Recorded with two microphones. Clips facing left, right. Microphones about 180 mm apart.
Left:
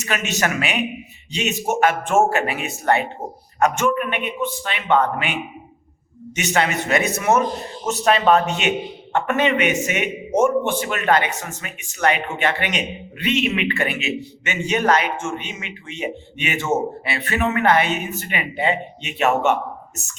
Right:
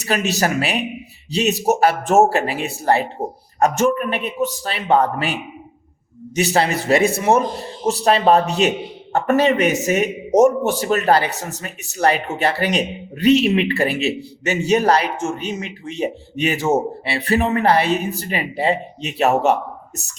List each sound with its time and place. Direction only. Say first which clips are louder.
0.0 s a man's voice: right 3 dB; 35° right (ahead or behind)